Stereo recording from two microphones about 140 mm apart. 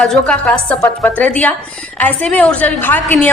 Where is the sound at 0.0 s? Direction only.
5° left (ahead or behind).